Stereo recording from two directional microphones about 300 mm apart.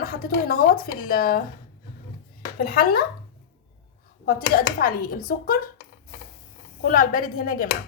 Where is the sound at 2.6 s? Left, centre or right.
Left.